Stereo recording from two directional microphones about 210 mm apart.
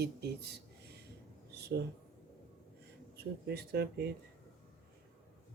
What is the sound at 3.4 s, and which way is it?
Speech, 50° right (ahead or behind).